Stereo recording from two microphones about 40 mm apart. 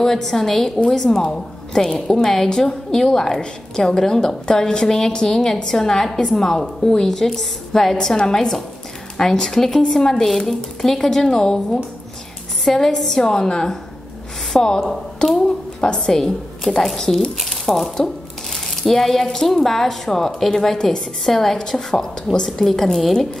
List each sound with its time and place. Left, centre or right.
0.0 s a woman's voice: centre
16.1 s a woman's voice: centre
20.7 s a woman's voice: centre
21.3 s a woman's voice: centre